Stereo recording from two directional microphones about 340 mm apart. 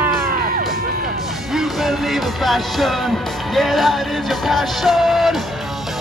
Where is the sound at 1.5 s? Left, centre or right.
Centre.